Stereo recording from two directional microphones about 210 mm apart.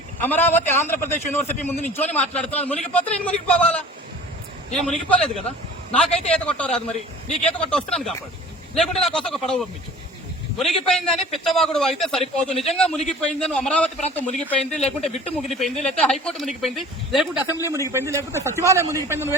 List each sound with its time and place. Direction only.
0.2 s a man's voice: 10° left (ahead or behind)
4.7 s a man's voice: centre (ahead or behind)
14.8 s speech: 30° left (ahead or behind)
15.6 s a man's voice: centre (ahead or behind)